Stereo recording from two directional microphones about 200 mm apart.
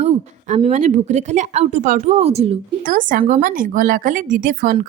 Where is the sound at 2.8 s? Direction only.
40° right (ahead or behind).